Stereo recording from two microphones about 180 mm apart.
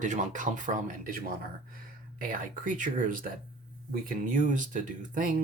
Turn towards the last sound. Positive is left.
turn(degrees=-45)  # may be behind; listen again after turning